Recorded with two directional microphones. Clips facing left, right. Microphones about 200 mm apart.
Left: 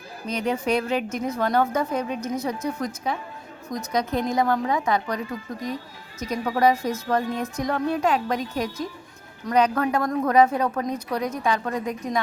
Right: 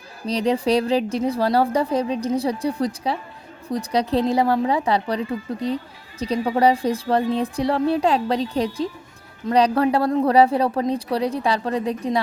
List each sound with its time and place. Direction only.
0.3 s a woman's voice: 35° right (ahead or behind)